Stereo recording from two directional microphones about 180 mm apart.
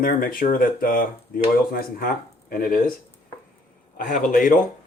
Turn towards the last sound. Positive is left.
turn(degrees=45)  # may be behind; listen again after turning